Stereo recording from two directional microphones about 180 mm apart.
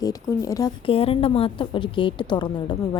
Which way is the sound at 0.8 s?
30° left (ahead or behind).